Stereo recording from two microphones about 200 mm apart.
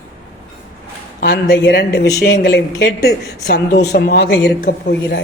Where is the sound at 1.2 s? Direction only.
50° left (ahead or behind).